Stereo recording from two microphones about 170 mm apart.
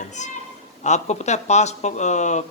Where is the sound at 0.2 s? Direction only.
45° left (ahead or behind).